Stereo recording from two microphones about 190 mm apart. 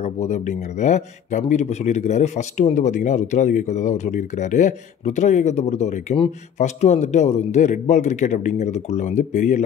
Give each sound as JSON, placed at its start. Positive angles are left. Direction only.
{"t": 0.0, "sound": "speech", "side_deg": 35}